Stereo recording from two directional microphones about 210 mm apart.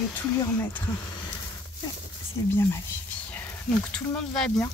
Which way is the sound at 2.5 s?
10° left (ahead or behind).